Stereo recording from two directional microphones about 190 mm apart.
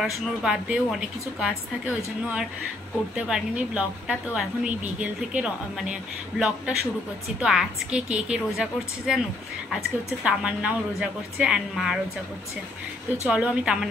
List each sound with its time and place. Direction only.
0.0 s a woman's voice: 5° right (ahead or behind)
3.2 s a woman's voice: 5° right (ahead or behind)
13.3 s a woman's voice: 5° right (ahead or behind)